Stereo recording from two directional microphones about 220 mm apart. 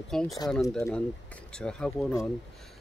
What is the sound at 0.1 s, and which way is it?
Speech, centre (ahead or behind).